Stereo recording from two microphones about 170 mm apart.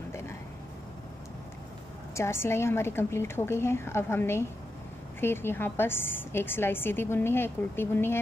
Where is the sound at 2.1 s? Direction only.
15° left (ahead or behind).